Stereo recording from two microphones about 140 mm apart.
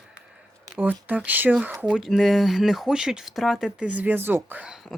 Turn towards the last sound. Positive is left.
turn(degrees=-5)  # may be behind; listen again after turning